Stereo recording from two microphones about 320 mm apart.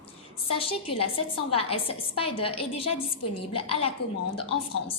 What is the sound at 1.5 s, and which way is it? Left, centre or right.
A woman's voice, centre.